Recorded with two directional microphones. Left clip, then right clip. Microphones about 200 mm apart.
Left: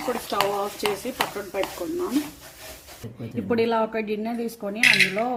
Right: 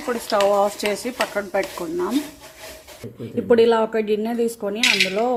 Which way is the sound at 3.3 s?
15° right (ahead or behind).